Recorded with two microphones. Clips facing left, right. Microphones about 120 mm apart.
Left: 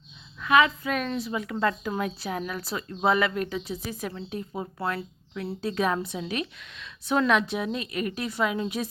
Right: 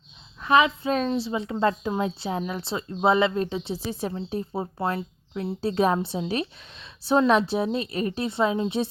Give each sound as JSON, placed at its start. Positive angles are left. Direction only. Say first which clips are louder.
{"t": 0.6, "sound": "a woman's voice", "louder": "right 2 dB", "side_deg": -30}